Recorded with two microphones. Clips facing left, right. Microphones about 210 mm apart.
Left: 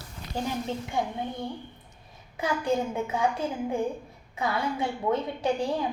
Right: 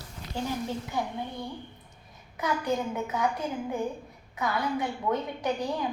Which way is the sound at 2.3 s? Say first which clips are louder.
Left 1 dB; 30° left (ahead or behind).